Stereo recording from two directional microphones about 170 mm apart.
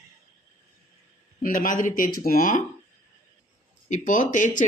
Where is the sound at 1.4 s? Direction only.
50° left (ahead or behind).